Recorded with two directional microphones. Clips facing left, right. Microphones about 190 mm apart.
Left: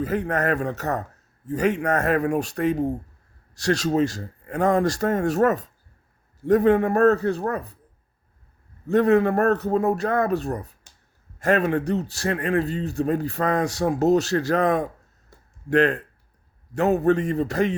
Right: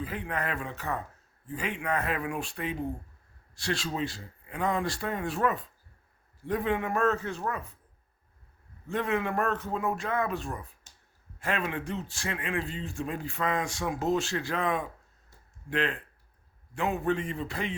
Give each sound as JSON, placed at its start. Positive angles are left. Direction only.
{"t": 0.0, "sound": "a man's voice", "side_deg": 45}
{"t": 8.9, "sound": "a man's voice", "side_deg": 40}